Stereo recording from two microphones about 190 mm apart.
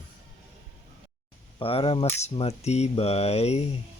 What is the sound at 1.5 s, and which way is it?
Speech, 30° left (ahead or behind).